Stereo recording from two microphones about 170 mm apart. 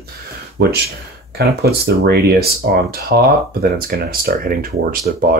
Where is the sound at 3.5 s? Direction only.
60° right (ahead or behind).